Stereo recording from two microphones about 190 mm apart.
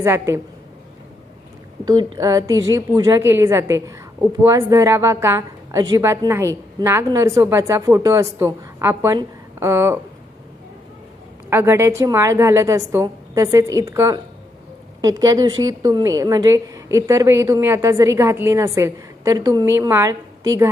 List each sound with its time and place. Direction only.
0.0 s a woman's voice: 15° right (ahead or behind)
1.8 s a woman's voice: 20° right (ahead or behind)
11.4 s a woman's voice: 10° right (ahead or behind)